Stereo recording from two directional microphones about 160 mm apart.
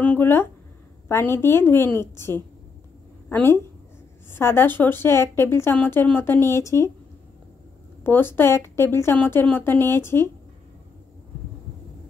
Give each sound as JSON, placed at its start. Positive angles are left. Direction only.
{"t": 0.0, "sound": "a woman's voice", "side_deg": 10}
{"t": 8.0, "sound": "speech", "side_deg": 15}